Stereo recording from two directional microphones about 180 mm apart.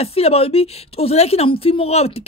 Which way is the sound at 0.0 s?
35° left (ahead or behind).